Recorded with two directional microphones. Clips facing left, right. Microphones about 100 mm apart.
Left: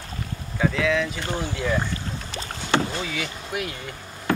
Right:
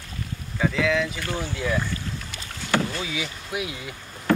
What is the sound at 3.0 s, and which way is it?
Speech, 5° right (ahead or behind).